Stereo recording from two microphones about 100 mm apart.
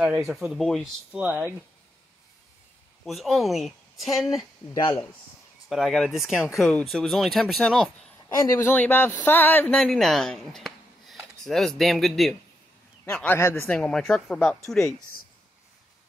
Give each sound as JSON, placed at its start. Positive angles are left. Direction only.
{"t": 0.3, "sound": "speech", "side_deg": -10}
{"t": 0.6, "sound": "speech", "side_deg": 5}
{"t": 1.1, "sound": "speech", "side_deg": -15}
{"t": 3.1, "sound": "speech", "side_deg": 0}
{"t": 4.7, "sound": "speech", "side_deg": 35}
{"t": 5.7, "sound": "speech", "side_deg": 0}
{"t": 8.5, "sound": "speech", "side_deg": 20}
{"t": 9.8, "sound": "speech", "side_deg": 5}
{"t": 13.1, "sound": "speech", "side_deg": 15}
{"t": 13.4, "sound": "speech", "side_deg": 25}
{"t": 13.7, "sound": "speech", "side_deg": 5}